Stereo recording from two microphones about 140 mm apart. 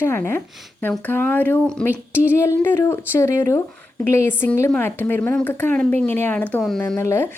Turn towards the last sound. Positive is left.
turn(degrees=20)  # may be behind; listen again after turning